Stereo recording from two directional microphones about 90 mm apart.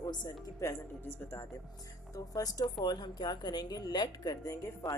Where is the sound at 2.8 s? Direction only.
55° left (ahead or behind).